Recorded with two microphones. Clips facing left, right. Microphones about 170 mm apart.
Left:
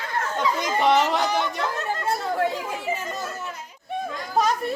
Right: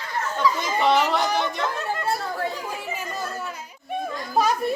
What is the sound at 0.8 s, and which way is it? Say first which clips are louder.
Speech: even; 15° left (ahead or behind).